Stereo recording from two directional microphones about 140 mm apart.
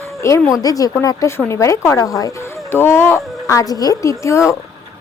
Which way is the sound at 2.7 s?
15° left (ahead or behind).